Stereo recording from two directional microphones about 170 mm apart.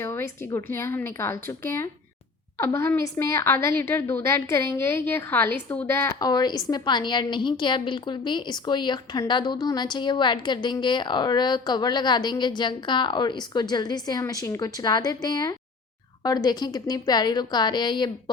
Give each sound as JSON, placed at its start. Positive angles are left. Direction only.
{"t": 0.0, "sound": "a woman's voice", "side_deg": 15}